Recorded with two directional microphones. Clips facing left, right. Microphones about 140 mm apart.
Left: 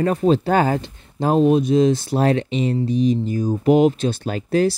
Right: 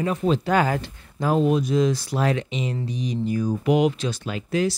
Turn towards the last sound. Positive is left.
turn(degrees=40)  # may be behind; listen again after turning